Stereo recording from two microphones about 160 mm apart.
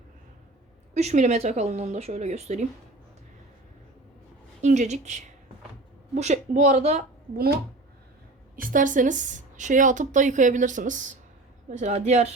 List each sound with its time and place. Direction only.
0.9 s speech: 45° right (ahead or behind)
4.6 s speech: 50° right (ahead or behind)
8.5 s speech: 60° right (ahead or behind)